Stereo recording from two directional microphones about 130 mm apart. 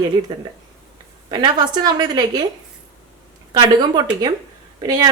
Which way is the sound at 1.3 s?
35° right (ahead or behind).